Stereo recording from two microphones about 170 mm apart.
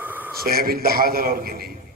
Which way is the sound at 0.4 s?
60° right (ahead or behind).